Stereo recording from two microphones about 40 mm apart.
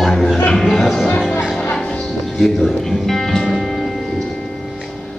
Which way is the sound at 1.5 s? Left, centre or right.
Left.